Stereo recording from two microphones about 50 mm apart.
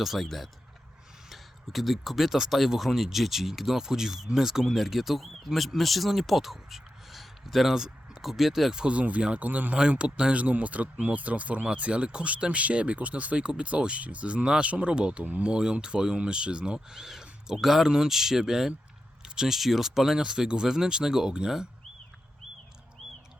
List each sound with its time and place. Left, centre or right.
0.0 s speech: centre
8.7 s speech: right
9.9 s speech: right
15.5 s speech: centre